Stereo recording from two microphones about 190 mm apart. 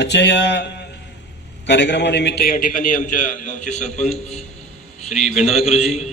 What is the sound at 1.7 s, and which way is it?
A man's voice, 65° left (ahead or behind).